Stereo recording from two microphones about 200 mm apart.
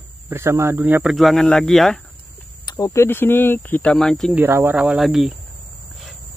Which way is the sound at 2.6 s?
15° left (ahead or behind).